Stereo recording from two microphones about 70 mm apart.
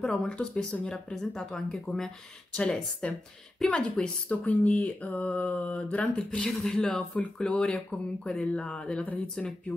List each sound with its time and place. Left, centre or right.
0.2 s speech: centre